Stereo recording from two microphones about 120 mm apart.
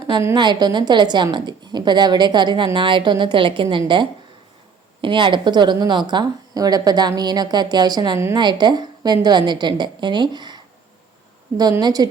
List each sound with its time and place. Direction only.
0.3 s a woman's voice: 40° right (ahead or behind)
11.8 s a woman's voice: 35° right (ahead or behind)